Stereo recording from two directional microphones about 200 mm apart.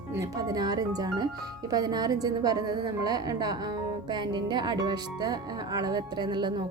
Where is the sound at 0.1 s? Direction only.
15° right (ahead or behind).